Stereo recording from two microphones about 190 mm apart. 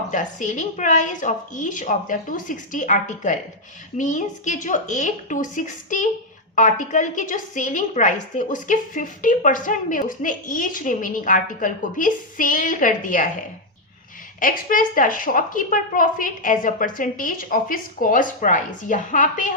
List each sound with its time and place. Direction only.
0.1 s a woman's voice: 40° left (ahead or behind)
14.3 s a woman's voice: 45° left (ahead or behind)